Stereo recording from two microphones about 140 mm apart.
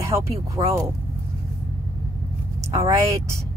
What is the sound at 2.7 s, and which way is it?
Speech, 20° right (ahead or behind).